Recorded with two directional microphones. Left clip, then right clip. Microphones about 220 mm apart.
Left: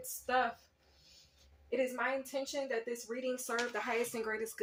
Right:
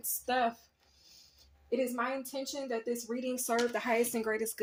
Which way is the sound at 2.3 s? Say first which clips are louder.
Even; 50° right (ahead or behind).